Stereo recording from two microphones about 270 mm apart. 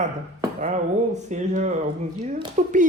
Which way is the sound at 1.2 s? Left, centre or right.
Right.